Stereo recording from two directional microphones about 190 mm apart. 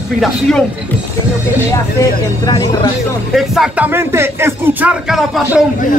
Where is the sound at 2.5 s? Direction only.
20° left (ahead or behind).